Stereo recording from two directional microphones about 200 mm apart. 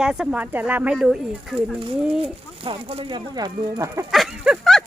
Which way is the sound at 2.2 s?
30° right (ahead or behind).